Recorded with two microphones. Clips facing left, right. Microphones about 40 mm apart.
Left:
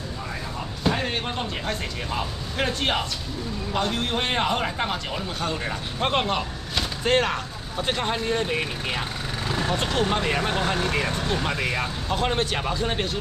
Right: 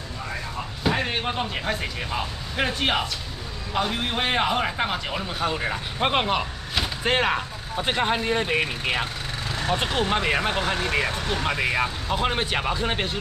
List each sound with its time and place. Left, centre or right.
0.8 s a man's voice: centre